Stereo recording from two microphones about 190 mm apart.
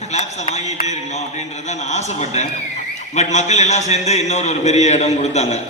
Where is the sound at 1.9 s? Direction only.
35° left (ahead or behind).